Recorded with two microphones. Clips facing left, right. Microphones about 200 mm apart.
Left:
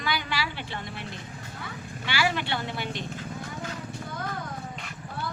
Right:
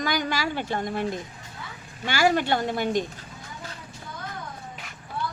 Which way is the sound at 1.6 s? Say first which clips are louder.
Left 2 dB; 60° left (ahead or behind).